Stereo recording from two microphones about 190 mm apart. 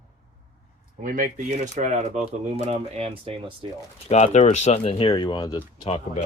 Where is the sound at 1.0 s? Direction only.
45° right (ahead or behind); by 3.5 s 30° right (ahead or behind).